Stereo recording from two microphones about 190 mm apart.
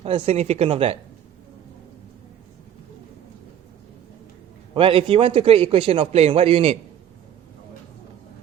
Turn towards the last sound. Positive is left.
turn(degrees=-30)  # may be behind; listen again after turning